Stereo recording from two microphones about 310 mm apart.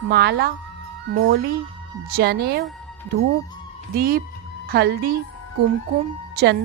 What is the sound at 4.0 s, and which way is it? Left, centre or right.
Speech, right.